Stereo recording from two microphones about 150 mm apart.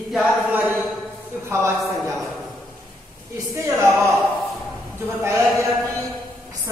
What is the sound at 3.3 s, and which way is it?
Speech, 20° right (ahead or behind).